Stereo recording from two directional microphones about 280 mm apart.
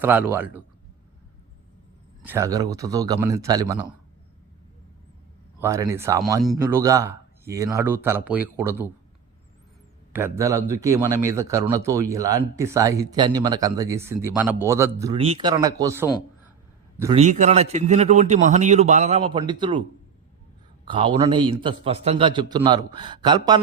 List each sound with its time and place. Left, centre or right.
0.0 s speech: centre
2.2 s speech: centre
5.5 s speech: centre
10.1 s a man's voice: centre
20.8 s speech: centre